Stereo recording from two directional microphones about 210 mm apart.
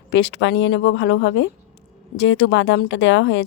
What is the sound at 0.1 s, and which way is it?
Speech, 60° left (ahead or behind).